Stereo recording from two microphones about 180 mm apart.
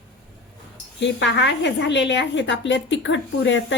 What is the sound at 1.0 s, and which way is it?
A woman's voice, 80° left.